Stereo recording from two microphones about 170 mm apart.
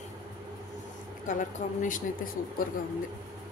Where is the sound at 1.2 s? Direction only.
50° left (ahead or behind).